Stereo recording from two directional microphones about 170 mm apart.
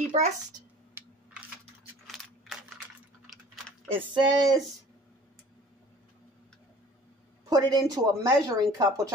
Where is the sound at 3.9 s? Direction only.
25° right (ahead or behind).